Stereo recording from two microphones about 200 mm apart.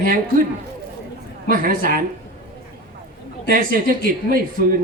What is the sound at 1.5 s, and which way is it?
Speech, 45° right (ahead or behind).